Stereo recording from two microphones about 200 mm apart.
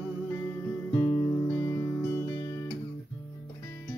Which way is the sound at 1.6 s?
15° left (ahead or behind).